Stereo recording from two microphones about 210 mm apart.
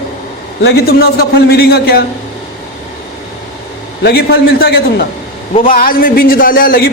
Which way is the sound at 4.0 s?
50° left (ahead or behind).